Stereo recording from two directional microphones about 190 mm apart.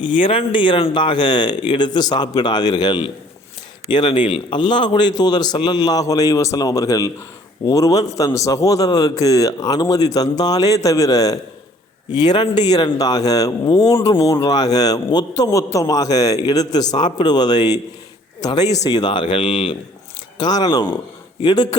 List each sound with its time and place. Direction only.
0.0 s a man's voice: 25° left (ahead or behind)